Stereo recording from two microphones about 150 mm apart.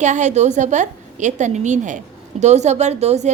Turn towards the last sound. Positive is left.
turn(degrees=-50)  # may be behind; listen again after turning